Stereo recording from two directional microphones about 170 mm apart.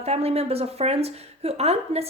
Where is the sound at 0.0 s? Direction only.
35° right (ahead or behind).